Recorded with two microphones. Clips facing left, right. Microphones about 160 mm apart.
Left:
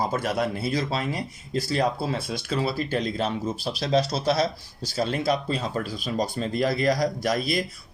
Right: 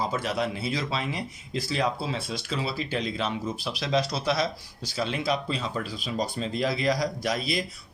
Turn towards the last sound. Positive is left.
turn(degrees=45)  # may be behind; listen again after turning